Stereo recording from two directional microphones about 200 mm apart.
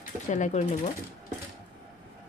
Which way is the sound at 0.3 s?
35° left (ahead or behind).